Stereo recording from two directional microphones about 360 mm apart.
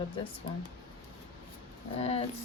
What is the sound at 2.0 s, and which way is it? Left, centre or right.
Speech, centre.